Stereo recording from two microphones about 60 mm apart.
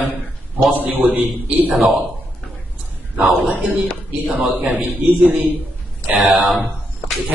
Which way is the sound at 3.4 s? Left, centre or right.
Right.